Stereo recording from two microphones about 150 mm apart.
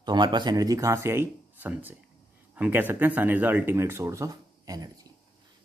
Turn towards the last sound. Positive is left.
turn(degrees=-25)  # may be behind; listen again after turning